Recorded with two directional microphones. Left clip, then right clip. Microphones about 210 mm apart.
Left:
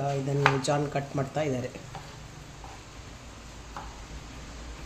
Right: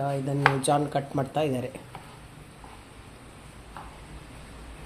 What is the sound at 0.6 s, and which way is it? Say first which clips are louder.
Speech: right 3 dB; 15° right (ahead or behind).